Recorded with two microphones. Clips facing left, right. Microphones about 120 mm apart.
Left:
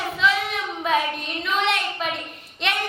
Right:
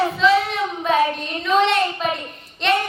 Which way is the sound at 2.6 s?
Centre (ahead or behind).